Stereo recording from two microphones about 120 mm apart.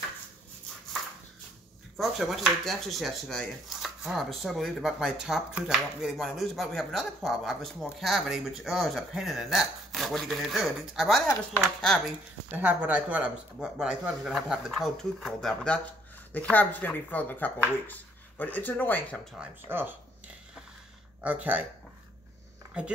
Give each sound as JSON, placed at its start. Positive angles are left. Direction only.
{"t": 2.0, "sound": "speech", "side_deg": 0}
{"t": 12.4, "sound": "speech", "side_deg": -15}
{"t": 19.7, "sound": "speech", "side_deg": -15}
{"t": 21.2, "sound": "speech", "side_deg": -10}
{"t": 22.8, "sound": "speech", "side_deg": -10}